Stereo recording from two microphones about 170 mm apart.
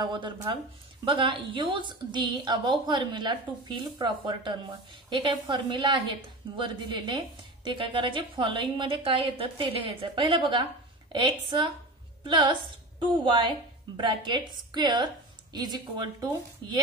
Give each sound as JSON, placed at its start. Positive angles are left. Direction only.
{"t": 0.0, "sound": "a woman's voice", "side_deg": -25}